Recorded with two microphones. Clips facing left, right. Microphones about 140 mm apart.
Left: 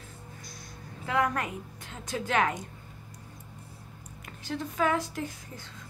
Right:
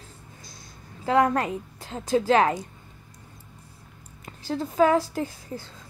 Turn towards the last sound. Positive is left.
turn(degrees=-35)  # may be behind; listen again after turning